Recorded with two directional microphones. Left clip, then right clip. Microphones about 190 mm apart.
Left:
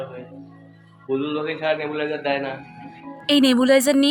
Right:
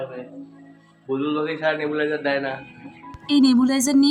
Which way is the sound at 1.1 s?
10° left (ahead or behind).